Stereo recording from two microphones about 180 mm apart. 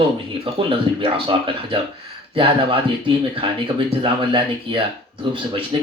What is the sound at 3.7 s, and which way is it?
Speech, 30° right (ahead or behind).